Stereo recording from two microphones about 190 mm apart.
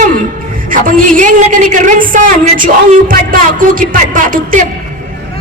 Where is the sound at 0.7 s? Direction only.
45° right (ahead or behind).